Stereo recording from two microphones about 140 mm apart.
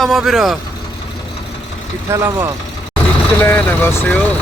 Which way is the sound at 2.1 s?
20° right (ahead or behind).